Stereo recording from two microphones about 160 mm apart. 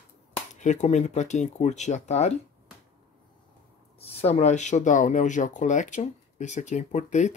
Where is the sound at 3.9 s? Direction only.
40° left (ahead or behind).